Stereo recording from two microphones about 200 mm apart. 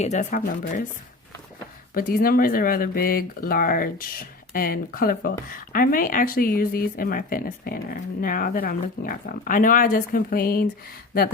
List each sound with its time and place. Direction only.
0.0 s speech: 35° left (ahead or behind)
2.0 s speech: 45° left (ahead or behind)